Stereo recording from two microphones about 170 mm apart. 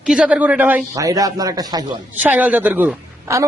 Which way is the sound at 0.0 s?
5° right (ahead or behind).